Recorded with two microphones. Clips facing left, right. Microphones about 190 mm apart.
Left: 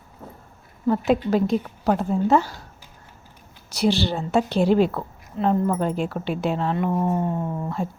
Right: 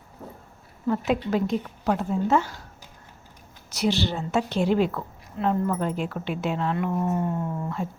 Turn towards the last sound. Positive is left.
turn(degrees=30)  # may be behind; listen again after turning